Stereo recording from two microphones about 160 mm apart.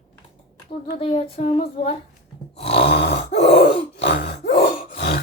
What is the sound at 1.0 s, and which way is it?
Speech, 40° left (ahead or behind).